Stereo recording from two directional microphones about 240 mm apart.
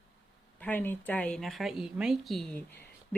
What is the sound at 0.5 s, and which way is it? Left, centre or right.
Speech, centre.